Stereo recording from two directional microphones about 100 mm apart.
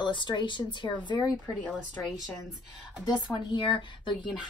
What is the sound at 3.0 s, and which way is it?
Speech, 50° left (ahead or behind).